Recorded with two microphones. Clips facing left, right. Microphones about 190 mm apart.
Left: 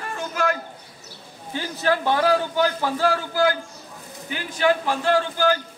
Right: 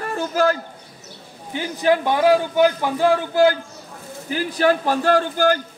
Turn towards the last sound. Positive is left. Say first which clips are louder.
# right 3 dB
turn(degrees=-45)  # may be behind; listen again after turning